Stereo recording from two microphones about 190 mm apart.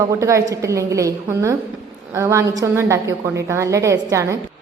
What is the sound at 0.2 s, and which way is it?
A woman's voice, 15° right (ahead or behind).